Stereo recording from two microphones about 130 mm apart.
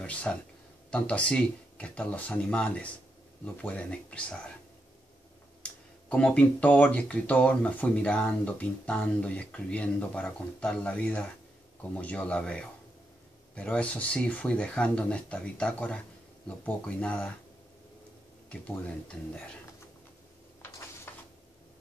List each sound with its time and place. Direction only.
0.0 s speech: 10° left (ahead or behind)
5.6 s speech: 10° left (ahead or behind)
18.5 s speech: 10° left (ahead or behind)
21.1 s a sound: 20° left (ahead or behind)